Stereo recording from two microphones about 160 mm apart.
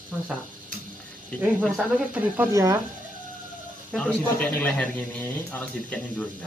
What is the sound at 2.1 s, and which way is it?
Speech, 10° right (ahead or behind).